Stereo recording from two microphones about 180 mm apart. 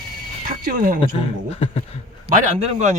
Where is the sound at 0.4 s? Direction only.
50° right (ahead or behind).